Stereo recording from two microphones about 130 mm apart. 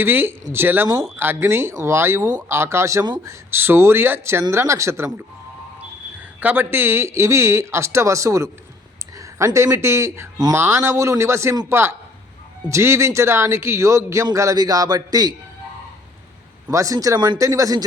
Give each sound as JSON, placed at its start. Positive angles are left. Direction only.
{"t": 0.0, "sound": "speech", "side_deg": -15}
{"t": 3.5, "sound": "speech", "side_deg": -15}
{"t": 6.4, "sound": "speech", "side_deg": -15}
{"t": 16.6, "sound": "speech", "side_deg": -25}